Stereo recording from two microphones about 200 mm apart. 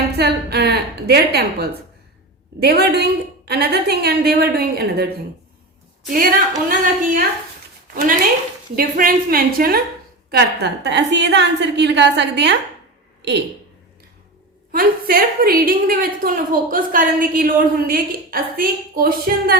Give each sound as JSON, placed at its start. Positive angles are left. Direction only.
{"t": 0.2, "sound": "a woman's voice", "side_deg": -55}
{"t": 6.1, "sound": "a woman's voice", "side_deg": -45}
{"t": 8.7, "sound": "a woman's voice", "side_deg": -45}
{"t": 14.7, "sound": "a woman's voice", "side_deg": -50}